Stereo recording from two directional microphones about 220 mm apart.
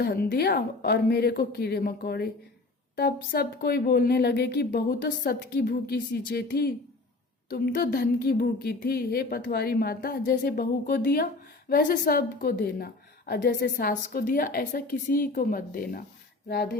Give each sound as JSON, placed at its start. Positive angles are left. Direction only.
{"t": 0.0, "sound": "a woman's voice", "side_deg": 45}